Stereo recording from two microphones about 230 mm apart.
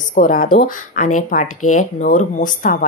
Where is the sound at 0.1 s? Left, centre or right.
Left.